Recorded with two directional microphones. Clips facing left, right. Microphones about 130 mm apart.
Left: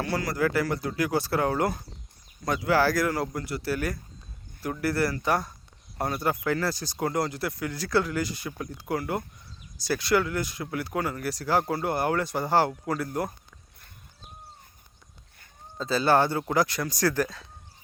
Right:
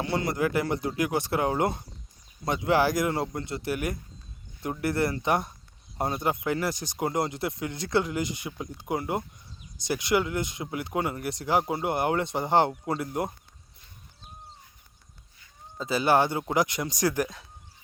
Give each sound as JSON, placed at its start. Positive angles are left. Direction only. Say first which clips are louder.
{"t": 0.0, "sound": "speech", "louder": "even", "side_deg": -20}
{"t": 15.8, "sound": "speech", "louder": "left 1 dB", "side_deg": -15}